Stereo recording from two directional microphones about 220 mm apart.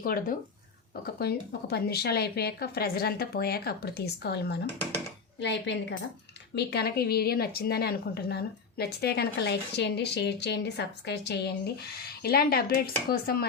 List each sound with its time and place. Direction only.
0.0 s speech: 40° left (ahead or behind)